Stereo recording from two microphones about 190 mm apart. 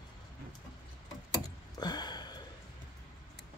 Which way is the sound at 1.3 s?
20° left (ahead or behind).